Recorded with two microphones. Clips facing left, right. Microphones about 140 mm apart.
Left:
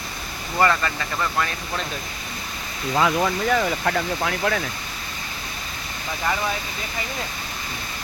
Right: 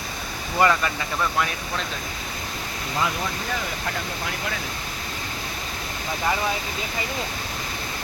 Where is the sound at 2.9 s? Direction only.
90° left.